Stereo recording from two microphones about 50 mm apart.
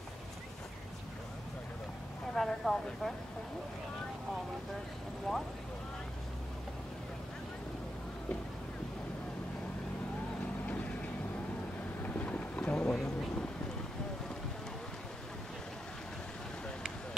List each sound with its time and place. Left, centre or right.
2.3 s speech: centre
5.3 s speech: centre
12.0 s boat: left; by 13.1 s centre